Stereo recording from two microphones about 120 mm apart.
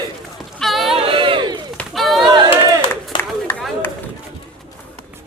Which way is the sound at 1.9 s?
Centre (ahead or behind).